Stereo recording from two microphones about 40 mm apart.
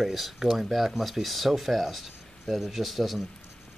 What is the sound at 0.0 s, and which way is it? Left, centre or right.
Speech, centre.